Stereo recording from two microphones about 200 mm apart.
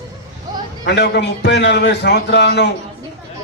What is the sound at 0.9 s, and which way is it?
A man's voice, 60° left (ahead or behind).